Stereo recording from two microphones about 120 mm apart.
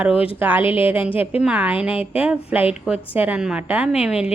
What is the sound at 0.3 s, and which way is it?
A woman's voice, 15° right (ahead or behind).